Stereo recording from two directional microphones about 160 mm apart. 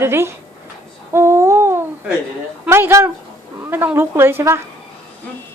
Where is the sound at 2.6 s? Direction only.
15° right (ahead or behind).